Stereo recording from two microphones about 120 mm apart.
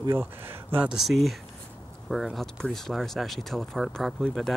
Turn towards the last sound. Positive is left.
turn(degrees=0)  # may be behind; listen again after turning